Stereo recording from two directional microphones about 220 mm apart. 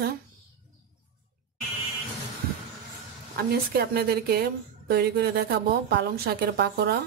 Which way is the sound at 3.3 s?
45° right (ahead or behind).